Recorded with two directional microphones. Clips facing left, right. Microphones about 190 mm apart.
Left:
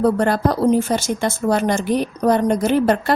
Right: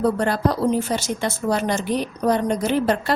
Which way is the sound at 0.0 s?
50° left (ahead or behind).